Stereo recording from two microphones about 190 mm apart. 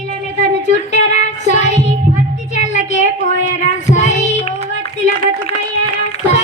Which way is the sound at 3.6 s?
40° left (ahead or behind).